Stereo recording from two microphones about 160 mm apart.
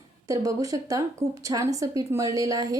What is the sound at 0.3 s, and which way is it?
A woman's voice, 20° right (ahead or behind).